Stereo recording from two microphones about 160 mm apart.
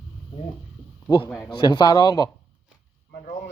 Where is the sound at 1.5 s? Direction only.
25° left (ahead or behind).